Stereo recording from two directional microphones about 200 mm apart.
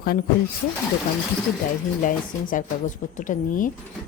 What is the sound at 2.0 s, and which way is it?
Speech, 40° left (ahead or behind).